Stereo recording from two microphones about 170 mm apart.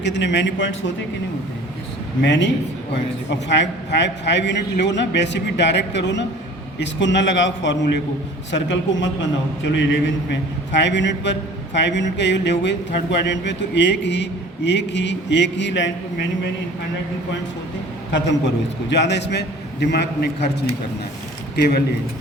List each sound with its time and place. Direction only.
0.0 s a man's voice: 90° left
2.2 s a man's voice: 90° left
18.1 s a man's voice: 90° left
21.5 s speech: 70° left (ahead or behind)